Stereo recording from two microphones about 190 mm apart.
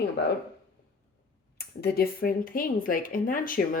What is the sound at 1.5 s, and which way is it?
Speech, 55° left (ahead or behind).